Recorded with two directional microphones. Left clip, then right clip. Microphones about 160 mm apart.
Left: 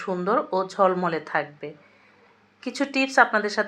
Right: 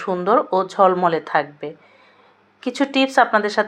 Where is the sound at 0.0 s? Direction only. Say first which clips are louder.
Right 6 dB; 20° right (ahead or behind).